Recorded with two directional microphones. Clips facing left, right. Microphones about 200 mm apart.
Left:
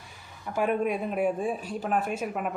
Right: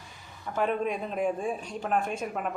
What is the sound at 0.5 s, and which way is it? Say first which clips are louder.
Speech: left 2 dB; 10° left (ahead or behind).